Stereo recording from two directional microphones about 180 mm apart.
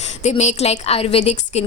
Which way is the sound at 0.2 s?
40° left (ahead or behind).